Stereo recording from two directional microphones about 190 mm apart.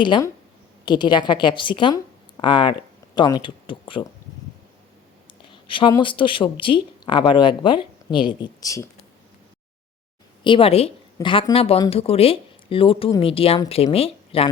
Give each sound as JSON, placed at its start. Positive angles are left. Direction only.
{"t": 0.0, "sound": "a woman's voice", "side_deg": 25}
{"t": 5.5, "sound": "a sound", "side_deg": 25}
{"t": 5.9, "sound": "a woman's voice", "side_deg": 25}
{"t": 10.4, "sound": "a woman's voice", "side_deg": 30}